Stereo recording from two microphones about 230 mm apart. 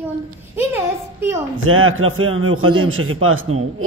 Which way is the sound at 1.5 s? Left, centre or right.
Right.